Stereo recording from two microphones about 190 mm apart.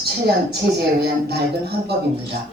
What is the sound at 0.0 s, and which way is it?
A woman's voice, 60° right (ahead or behind).